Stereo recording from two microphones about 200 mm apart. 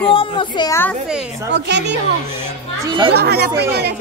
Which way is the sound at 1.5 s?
60° right (ahead or behind).